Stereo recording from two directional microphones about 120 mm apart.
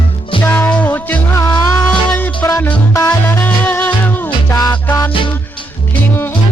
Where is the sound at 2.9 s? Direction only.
25° left (ahead or behind).